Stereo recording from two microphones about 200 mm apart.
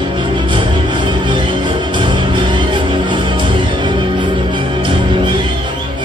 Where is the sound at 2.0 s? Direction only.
25° right (ahead or behind).